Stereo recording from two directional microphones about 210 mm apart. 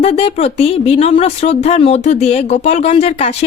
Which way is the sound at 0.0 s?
25° left (ahead or behind).